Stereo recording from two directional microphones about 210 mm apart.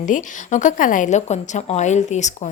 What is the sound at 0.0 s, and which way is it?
A woman's voice, 35° left (ahead or behind).